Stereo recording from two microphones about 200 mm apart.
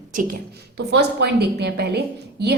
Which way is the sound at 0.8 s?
55° right (ahead or behind).